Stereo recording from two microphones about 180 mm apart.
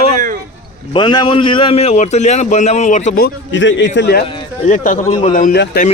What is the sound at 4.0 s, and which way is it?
Speech, 70° left (ahead or behind).